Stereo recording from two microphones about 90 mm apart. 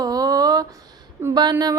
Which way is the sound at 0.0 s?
45° right (ahead or behind).